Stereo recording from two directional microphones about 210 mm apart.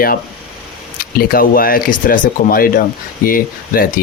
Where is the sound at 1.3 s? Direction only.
45° left (ahead or behind).